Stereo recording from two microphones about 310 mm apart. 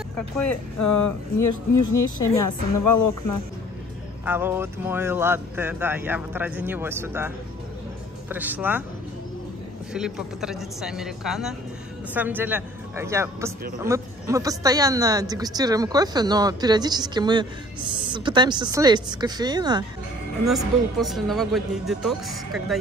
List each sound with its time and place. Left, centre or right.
0.7 s speech: left
4.2 s a woman's voice: centre
9.9 s a woman's voice: centre
20.4 s speech: centre